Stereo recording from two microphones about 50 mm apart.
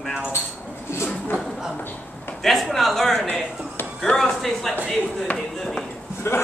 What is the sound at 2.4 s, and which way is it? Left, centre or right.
Speech, centre.